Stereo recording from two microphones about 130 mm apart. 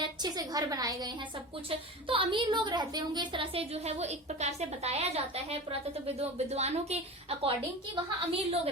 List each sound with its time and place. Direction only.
0.0 s a woman's voice: 30° right (ahead or behind)
2.0 s a woman's voice: 40° right (ahead or behind)